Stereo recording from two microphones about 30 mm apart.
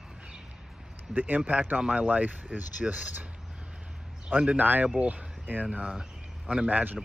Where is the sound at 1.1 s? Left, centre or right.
Right.